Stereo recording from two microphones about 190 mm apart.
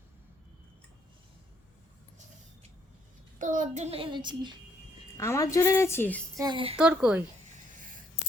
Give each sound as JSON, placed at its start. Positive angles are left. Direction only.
{"t": 3.3, "sound": "a child's voice", "side_deg": -40}
{"t": 5.1, "sound": "a woman's voice", "side_deg": 15}
{"t": 6.4, "sound": "speech", "side_deg": -25}
{"t": 6.7, "sound": "speech", "side_deg": -5}